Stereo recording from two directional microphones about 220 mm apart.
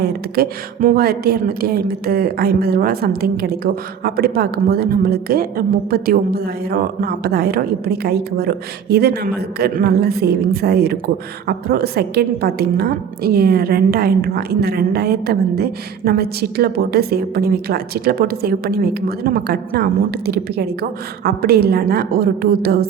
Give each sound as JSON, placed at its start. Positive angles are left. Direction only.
{"t": 0.0, "sound": "a woman's voice", "side_deg": -40}